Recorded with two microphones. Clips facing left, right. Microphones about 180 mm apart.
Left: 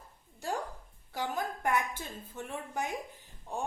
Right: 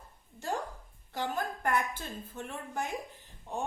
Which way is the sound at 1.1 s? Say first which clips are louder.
Right 1 dB; 15° left (ahead or behind).